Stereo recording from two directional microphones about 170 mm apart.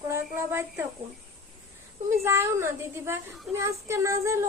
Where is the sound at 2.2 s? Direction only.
15° right (ahead or behind).